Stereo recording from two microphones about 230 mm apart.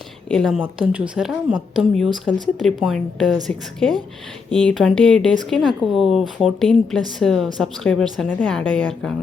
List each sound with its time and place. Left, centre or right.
0.3 s speech: centre